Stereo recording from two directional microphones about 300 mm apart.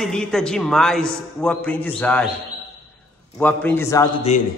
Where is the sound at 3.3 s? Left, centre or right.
Centre.